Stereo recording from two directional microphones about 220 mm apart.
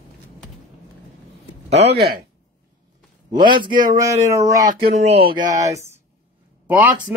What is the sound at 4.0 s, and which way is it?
Speech, 15° right (ahead or behind).